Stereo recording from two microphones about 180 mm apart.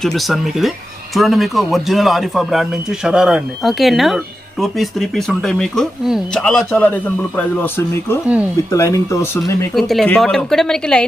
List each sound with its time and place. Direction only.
0.0 s speech: centre (ahead or behind)
9.9 s speech: centre (ahead or behind)